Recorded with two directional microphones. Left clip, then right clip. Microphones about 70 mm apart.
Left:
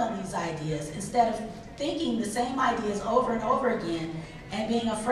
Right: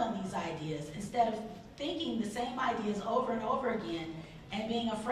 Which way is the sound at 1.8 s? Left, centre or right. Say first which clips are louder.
Left 7 dB; centre.